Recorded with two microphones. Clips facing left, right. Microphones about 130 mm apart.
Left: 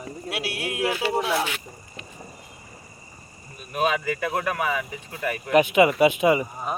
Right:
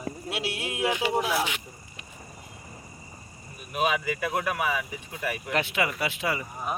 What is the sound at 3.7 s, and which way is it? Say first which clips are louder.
Speech: left 3 dB; 10° right (ahead or behind).